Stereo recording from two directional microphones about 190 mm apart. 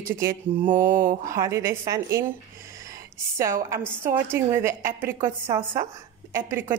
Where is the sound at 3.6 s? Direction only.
15° right (ahead or behind).